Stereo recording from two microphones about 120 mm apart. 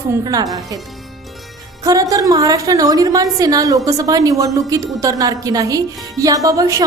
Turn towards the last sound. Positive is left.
turn(degrees=-25)  # may be behind; listen again after turning